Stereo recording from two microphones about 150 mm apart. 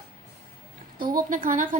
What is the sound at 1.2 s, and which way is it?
Speech, 65° right (ahead or behind).